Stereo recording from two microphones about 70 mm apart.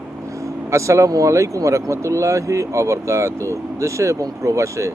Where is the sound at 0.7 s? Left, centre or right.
Right.